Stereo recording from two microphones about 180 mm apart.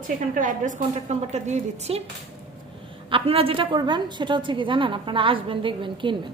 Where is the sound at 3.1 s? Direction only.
30° right (ahead or behind).